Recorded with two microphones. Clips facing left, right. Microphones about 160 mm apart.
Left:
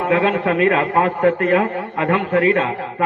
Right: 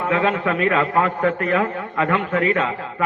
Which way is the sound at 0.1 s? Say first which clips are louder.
Left 3 dB; 35° left (ahead or behind).